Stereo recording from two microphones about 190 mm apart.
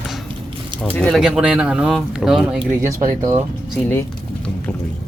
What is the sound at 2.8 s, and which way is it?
Speech, 15° right (ahead or behind).